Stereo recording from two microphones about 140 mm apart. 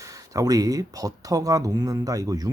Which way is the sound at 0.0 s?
25° right (ahead or behind).